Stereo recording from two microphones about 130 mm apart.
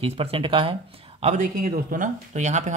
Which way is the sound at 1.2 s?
65° right (ahead or behind).